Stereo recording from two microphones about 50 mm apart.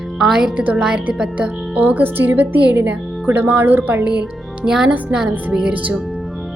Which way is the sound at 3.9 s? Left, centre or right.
Right.